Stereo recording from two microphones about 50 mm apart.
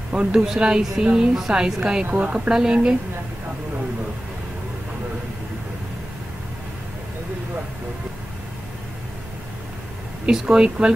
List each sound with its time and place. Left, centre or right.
0.1 s a woman's voice: centre
2.0 s a woman's voice: right
10.2 s speech: centre